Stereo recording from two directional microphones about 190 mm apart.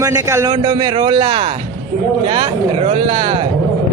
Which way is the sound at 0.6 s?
30° right (ahead or behind).